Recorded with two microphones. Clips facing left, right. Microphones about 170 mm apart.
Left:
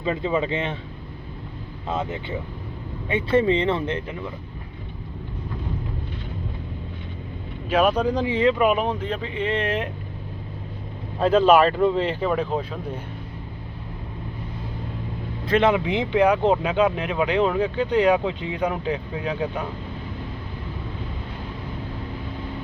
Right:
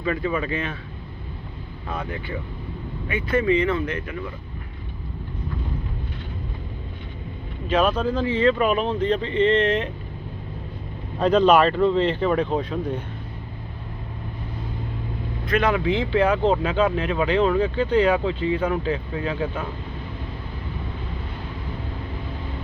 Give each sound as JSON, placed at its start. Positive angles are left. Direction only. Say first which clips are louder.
{"t": 0.0, "sound": "speech", "louder": "left 1 dB", "side_deg": 25}
{"t": 1.9, "sound": "speech", "louder": "left 3 dB", "side_deg": 25}
{"t": 7.7, "sound": "speech", "louder": "left 1 dB", "side_deg": 10}
{"t": 11.2, "sound": "speech", "louder": "even", "side_deg": 5}
{"t": 15.4, "sound": "speech", "louder": "left 2 dB", "side_deg": 25}